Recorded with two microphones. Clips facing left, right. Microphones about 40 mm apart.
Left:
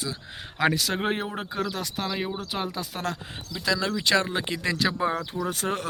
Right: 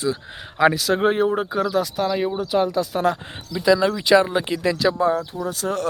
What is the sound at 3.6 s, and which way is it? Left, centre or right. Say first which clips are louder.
Speech: right 8 dB; centre.